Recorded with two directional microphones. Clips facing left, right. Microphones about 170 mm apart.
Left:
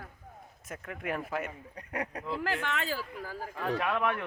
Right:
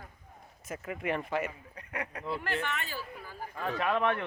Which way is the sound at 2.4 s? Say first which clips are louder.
Left 4 dB; 90° left.